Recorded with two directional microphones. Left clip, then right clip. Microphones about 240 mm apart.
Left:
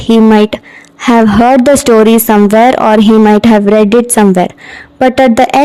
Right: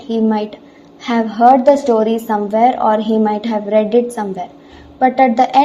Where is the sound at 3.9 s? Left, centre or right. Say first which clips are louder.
Left 8 dB; left.